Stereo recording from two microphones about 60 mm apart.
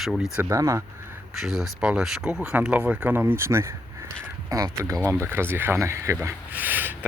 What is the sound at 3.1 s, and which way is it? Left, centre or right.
Speech, right.